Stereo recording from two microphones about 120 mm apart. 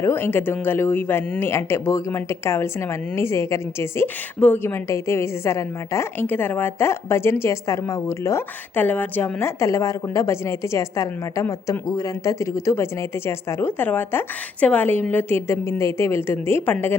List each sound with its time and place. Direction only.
0.0 s a woman's voice: 20° left (ahead or behind)